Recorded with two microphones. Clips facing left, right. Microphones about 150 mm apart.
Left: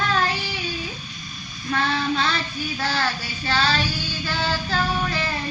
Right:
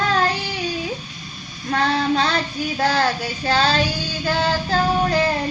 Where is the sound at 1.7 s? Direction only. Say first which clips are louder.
Right 4 dB; 40° right (ahead or behind).